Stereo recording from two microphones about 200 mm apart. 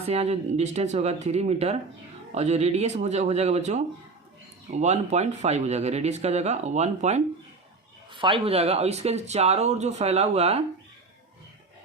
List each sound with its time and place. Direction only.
0.1 s speech: 30° right (ahead or behind)